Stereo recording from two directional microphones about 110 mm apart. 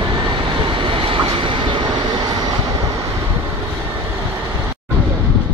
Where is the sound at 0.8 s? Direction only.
50° right (ahead or behind).